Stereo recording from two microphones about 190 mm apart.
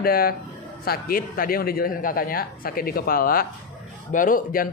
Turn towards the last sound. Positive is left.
turn(degrees=45)  # may be behind; listen again after turning